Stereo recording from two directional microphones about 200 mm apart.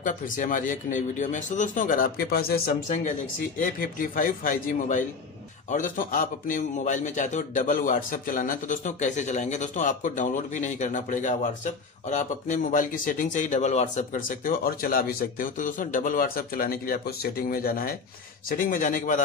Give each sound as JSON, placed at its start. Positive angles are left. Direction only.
{"t": 0.0, "sound": "a man's voice", "side_deg": 40}